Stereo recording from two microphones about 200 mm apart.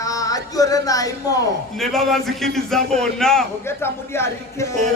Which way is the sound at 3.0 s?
5° left (ahead or behind).